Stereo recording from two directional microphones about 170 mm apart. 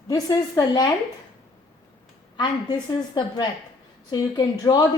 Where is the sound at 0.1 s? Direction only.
20° left (ahead or behind).